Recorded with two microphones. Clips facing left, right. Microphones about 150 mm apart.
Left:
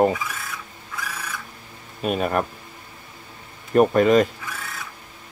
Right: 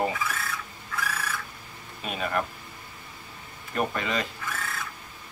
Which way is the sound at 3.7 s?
45° left (ahead or behind).